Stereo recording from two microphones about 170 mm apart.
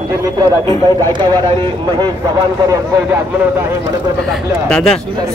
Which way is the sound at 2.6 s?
15° right (ahead or behind).